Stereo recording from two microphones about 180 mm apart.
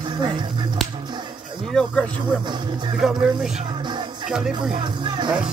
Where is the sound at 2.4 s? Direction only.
25° right (ahead or behind).